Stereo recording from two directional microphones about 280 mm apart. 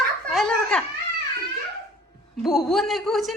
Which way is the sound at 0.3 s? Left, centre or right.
Centre.